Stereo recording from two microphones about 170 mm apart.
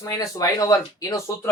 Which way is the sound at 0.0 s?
20° left (ahead or behind).